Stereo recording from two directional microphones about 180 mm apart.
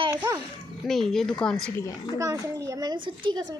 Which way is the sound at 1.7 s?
15° left (ahead or behind).